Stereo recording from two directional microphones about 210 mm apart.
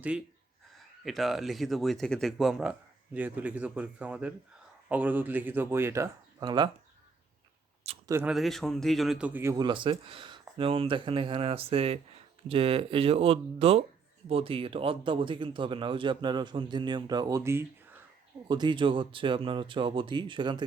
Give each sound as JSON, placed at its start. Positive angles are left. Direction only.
{"t": 1.0, "sound": "a man's voice", "side_deg": 0}
{"t": 8.0, "sound": "speech", "side_deg": -15}
{"t": 8.3, "sound": "a man's voice", "side_deg": 0}